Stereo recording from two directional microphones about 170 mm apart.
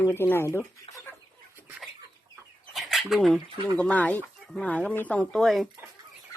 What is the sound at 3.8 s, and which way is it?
Speech, 10° left (ahead or behind).